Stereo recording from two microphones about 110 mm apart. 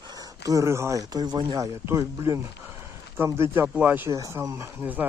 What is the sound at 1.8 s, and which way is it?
Speech, 25° right (ahead or behind).